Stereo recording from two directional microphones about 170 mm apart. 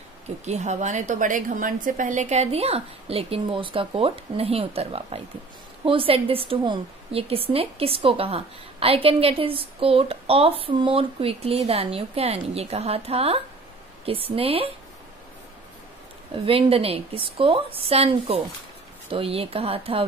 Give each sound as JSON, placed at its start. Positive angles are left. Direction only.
{"t": 0.5, "sound": "a woman's voice", "side_deg": -45}
{"t": 16.4, "sound": "a woman's voice", "side_deg": -35}